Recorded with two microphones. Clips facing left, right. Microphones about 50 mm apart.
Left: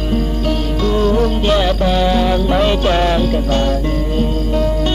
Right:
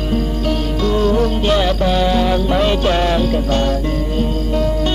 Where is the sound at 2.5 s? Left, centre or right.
Left.